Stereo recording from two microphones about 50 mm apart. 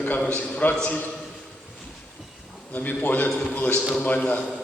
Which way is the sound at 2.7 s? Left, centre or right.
Left.